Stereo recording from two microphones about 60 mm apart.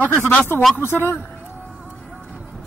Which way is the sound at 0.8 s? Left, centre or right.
Left.